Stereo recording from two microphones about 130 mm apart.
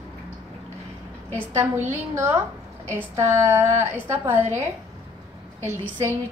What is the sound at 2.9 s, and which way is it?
A woman's voice, 20° right (ahead or behind).